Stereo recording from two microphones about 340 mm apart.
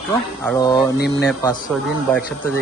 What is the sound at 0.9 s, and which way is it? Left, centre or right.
Speech, left.